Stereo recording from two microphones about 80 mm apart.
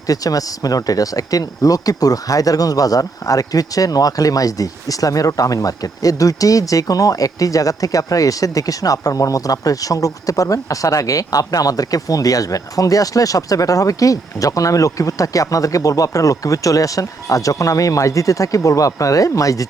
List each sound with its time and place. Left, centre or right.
0.1 s speech: left